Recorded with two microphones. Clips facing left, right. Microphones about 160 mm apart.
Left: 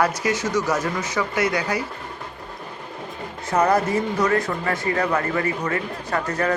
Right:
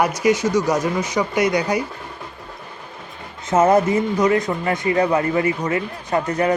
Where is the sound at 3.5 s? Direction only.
20° right (ahead or behind).